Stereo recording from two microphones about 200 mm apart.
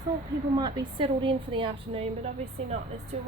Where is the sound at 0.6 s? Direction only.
20° right (ahead or behind).